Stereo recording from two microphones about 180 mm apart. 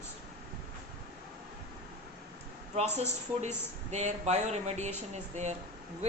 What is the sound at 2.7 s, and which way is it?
Speech, 40° right (ahead or behind).